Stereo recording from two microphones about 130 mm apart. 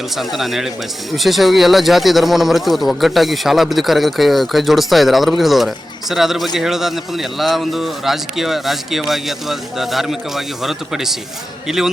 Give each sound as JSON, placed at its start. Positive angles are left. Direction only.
{"t": 0.2, "sound": "speech", "side_deg": 0}